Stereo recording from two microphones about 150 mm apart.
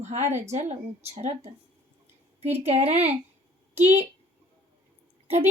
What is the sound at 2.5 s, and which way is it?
Speech, 45° right (ahead or behind).